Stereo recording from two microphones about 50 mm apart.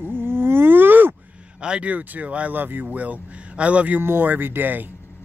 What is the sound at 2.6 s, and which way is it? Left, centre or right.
Speech, right.